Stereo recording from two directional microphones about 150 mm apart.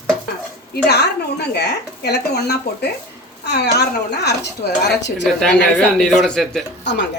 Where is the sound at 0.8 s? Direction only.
90° left.